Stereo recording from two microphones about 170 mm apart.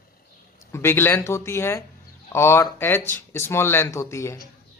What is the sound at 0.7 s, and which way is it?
Speech, 15° left (ahead or behind).